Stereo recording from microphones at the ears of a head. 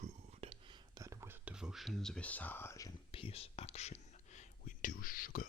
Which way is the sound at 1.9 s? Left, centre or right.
Centre.